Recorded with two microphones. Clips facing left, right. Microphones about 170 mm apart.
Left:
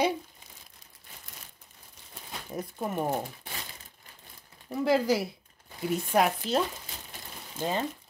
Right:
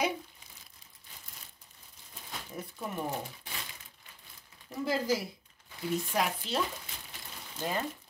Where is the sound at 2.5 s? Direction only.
45° left (ahead or behind).